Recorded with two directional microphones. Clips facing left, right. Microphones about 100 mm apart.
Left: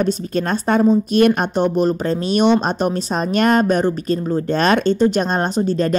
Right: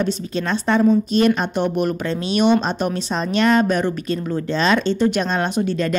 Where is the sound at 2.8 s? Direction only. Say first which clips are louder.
Left 3 dB; 45° left (ahead or behind).